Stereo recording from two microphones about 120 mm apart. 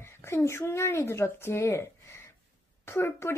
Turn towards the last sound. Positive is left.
turn(degrees=20)  # may be behind; listen again after turning